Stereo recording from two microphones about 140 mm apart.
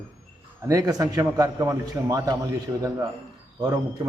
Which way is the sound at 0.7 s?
25° right (ahead or behind).